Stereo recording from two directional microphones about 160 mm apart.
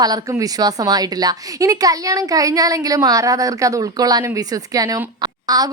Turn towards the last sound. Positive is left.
turn(degrees=-25)  # may be behind; listen again after turning